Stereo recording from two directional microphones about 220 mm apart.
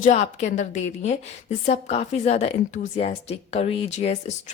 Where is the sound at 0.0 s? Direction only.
30° left (ahead or behind).